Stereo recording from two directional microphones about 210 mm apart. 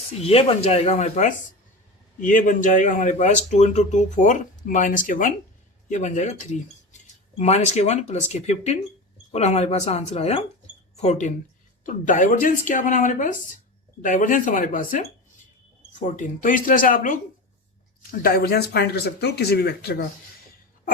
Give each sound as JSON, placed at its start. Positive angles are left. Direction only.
{"t": 0.2, "sound": "speech", "side_deg": 30}